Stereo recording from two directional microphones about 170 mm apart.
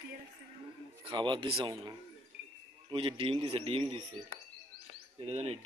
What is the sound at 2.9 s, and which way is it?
Speech, 30° right (ahead or behind).